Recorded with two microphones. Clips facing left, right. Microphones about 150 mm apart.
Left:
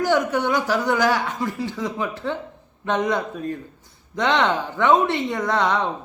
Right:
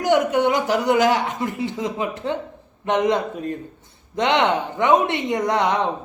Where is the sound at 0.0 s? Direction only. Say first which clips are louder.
Right 3 dB; 20° right (ahead or behind).